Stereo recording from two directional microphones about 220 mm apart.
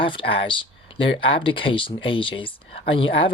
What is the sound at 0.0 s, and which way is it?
Speech, 25° left (ahead or behind).